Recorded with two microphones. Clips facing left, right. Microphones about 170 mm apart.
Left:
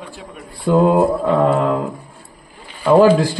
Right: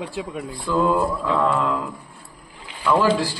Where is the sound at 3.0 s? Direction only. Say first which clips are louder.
Left 9 dB; 55° left (ahead or behind).